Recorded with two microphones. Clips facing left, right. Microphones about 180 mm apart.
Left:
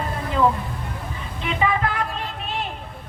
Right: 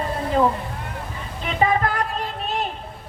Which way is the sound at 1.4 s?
40° right (ahead or behind).